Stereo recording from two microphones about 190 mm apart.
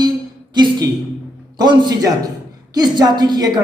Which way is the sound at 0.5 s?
25° right (ahead or behind).